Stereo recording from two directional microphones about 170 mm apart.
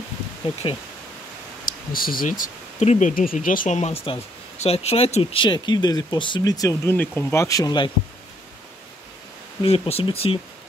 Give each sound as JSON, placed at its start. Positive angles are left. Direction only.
{"t": 0.6, "sound": "speech", "side_deg": 30}
{"t": 1.9, "sound": "speech", "side_deg": 60}
{"t": 4.0, "sound": "speech", "side_deg": 35}
{"t": 9.6, "sound": "speech", "side_deg": 35}